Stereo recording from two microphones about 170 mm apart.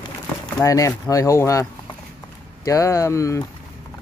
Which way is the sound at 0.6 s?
20° left (ahead or behind).